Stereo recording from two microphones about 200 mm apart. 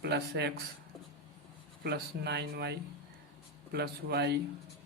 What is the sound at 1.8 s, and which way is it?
Speech, 55° right (ahead or behind).